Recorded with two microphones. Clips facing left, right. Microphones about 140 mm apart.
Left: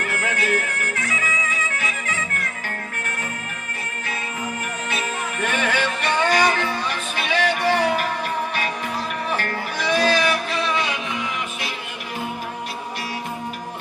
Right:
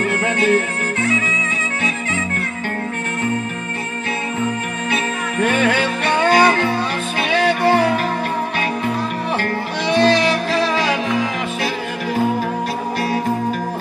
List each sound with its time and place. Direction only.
0.0 s music: 30° right (ahead or behind)
4.9 s music: 30° right (ahead or behind)
9.4 s music: 30° right (ahead or behind)